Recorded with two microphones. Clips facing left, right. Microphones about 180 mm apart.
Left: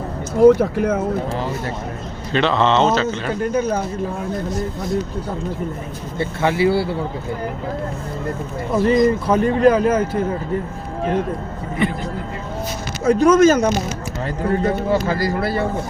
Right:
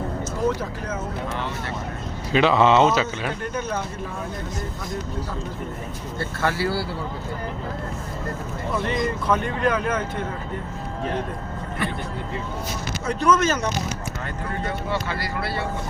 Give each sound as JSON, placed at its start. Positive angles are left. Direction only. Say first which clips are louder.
{"t": 0.3, "sound": "speech", "louder": "left 15 dB", "side_deg": 65}
{"t": 2.3, "sound": "speech", "louder": "even", "side_deg": -5}
{"t": 3.5, "sound": "speech", "louder": "left 8 dB", "side_deg": 40}
{"t": 6.1, "sound": "speech", "louder": "left 6 dB", "side_deg": 20}
{"t": 8.7, "sound": "speech", "louder": "left 10 dB", "side_deg": 35}
{"t": 13.1, "sound": "speech", "louder": "left 9 dB", "side_deg": 45}